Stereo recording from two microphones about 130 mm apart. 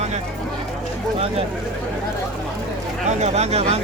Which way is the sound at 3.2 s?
60° right (ahead or behind).